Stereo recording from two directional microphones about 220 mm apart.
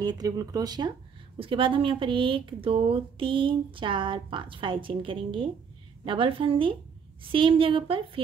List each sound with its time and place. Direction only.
0.0 s a woman's voice: 15° right (ahead or behind)